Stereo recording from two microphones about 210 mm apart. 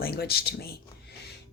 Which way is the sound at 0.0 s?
50° left (ahead or behind).